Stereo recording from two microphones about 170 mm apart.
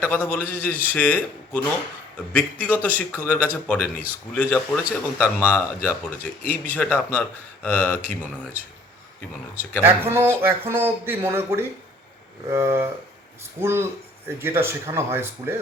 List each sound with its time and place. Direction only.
0.0 s speech: 10° left (ahead or behind)
9.8 s speech: 15° right (ahead or behind)